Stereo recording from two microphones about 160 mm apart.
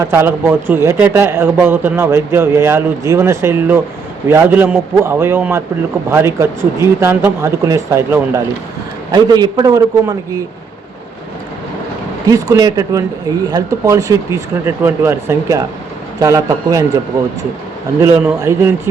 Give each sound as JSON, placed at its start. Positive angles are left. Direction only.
{"t": 0.0, "sound": "speech", "side_deg": -15}
{"t": 12.3, "sound": "speech", "side_deg": -25}
{"t": 18.0, "sound": "speech", "side_deg": -15}